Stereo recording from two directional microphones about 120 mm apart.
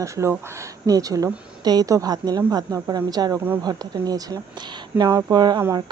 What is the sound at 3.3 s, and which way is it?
Speech, 15° right (ahead or behind).